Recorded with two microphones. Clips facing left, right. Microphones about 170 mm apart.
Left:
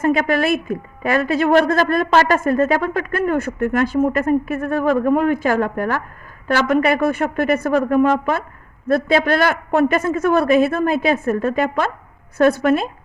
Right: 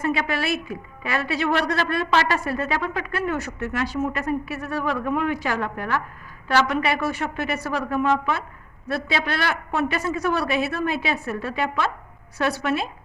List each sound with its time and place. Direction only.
0.0 s a woman's voice: 45° left (ahead or behind)